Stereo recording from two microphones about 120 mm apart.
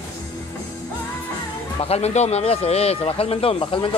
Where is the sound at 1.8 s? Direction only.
60° left (ahead or behind).